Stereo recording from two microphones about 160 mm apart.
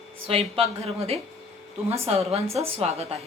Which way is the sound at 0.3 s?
40° right (ahead or behind).